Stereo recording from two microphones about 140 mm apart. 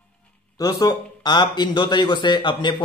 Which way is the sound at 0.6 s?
25° left (ahead or behind).